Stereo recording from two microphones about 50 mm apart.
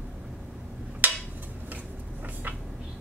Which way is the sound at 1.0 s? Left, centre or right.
Right.